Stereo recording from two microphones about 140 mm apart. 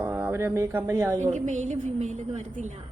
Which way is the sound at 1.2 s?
55° right (ahead or behind).